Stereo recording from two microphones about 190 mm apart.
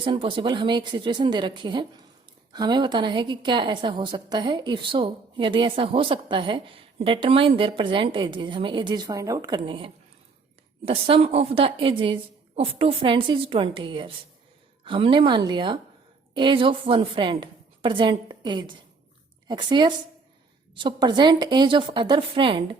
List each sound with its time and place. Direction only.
0.0 s a woman's voice: 25° right (ahead or behind)